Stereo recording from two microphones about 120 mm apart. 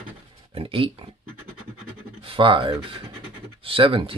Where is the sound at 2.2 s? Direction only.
45° right (ahead or behind).